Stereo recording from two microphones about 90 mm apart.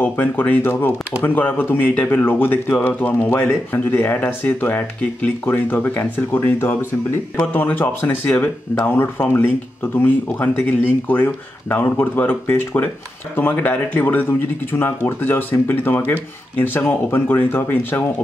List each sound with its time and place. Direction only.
0.0 s speech: 20° left (ahead or behind)